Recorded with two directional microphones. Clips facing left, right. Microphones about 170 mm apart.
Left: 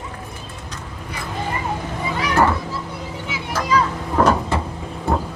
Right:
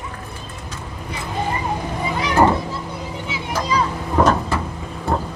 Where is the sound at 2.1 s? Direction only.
20° right (ahead or behind).